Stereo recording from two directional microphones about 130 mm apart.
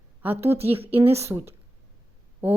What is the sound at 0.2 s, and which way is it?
Speech, 15° right (ahead or behind).